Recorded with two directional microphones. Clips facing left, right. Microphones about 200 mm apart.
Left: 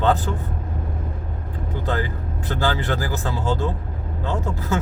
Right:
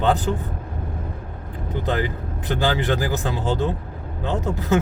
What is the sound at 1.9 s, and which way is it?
A man's voice, 20° right (ahead or behind).